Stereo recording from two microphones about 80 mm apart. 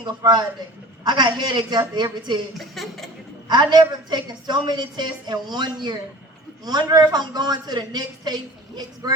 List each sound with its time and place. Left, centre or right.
0.2 s a woman's voice: right
2.6 s a sound: centre
3.5 s a woman's voice: right